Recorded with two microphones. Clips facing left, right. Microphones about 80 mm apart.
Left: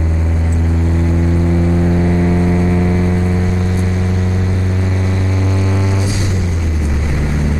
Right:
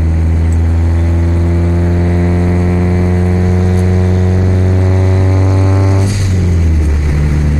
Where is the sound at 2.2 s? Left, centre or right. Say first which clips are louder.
Right 1 dB; centre.